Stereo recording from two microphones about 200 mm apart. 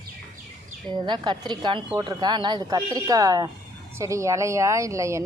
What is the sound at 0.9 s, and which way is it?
A woman's voice, 20° right (ahead or behind).